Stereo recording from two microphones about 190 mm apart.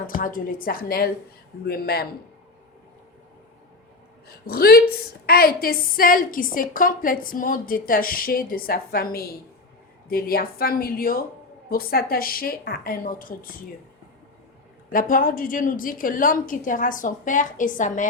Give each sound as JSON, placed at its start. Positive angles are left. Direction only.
{"t": 0.2, "sound": "a woman's voice", "side_deg": 45}
{"t": 4.4, "sound": "a woman's voice", "side_deg": 55}
{"t": 14.8, "sound": "a woman's voice", "side_deg": 45}